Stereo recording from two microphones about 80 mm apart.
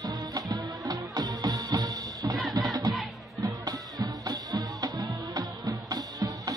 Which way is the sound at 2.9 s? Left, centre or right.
Centre.